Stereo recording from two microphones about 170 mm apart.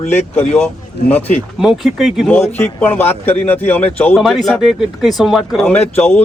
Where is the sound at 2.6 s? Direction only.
10° left (ahead or behind).